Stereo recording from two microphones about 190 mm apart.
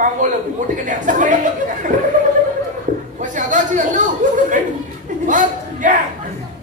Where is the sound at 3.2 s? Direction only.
40° right (ahead or behind).